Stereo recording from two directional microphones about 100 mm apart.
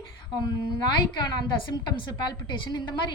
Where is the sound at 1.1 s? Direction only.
45° left (ahead or behind).